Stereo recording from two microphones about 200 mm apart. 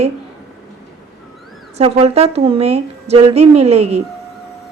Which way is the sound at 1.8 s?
30° right (ahead or behind).